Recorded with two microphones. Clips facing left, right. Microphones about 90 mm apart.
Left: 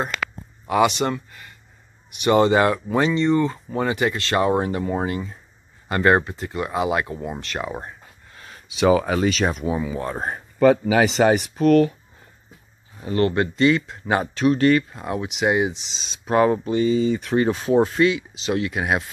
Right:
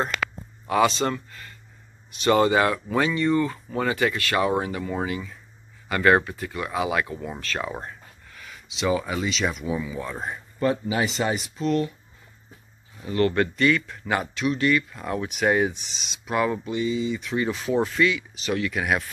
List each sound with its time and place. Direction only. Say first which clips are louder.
0.7 s speech: left 2 dB; 15° left (ahead or behind)
8.3 s a sound: left 1 dB; 35° left (ahead or behind)
8.7 s speech: left 7 dB; 60° left (ahead or behind); by 10.1 s 45° left (ahead or behind)
10.6 s speech: left 8 dB; 90° left; by 11.9 s 60° left (ahead or behind)
13.0 s speech: left 2 dB; 35° left (ahead or behind)
13.3 s speech: left 3 dB; 25° left (ahead or behind)
15.0 s speech: left 2 dB; 20° left (ahead or behind)
16.0 s speech: left 6 dB; 35° left (ahead or behind)